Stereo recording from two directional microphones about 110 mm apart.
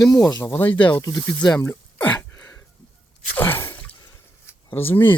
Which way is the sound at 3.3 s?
20° left (ahead or behind).